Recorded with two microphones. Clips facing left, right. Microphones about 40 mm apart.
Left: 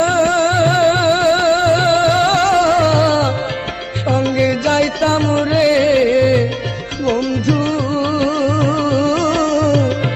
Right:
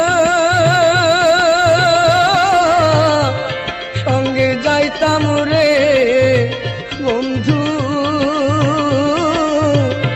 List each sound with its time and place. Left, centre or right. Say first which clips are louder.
0.0 s music: right 1 dB; right
2.2 s music: right 1 dB; centre; by 3.2 s right
4.1 s music: even; right
5.1 s music: right 1 dB; right
8.2 s music: right 1 dB; right
9.1 s music: even; right